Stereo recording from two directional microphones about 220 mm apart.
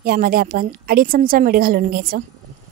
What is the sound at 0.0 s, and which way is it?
A woman's voice, 45° right (ahead or behind).